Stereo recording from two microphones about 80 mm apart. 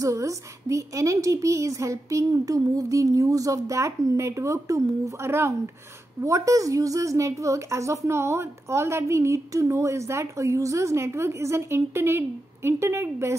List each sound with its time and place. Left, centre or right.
0.0 s a woman's voice: right